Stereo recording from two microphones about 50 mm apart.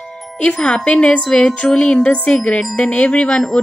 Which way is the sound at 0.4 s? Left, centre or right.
Left.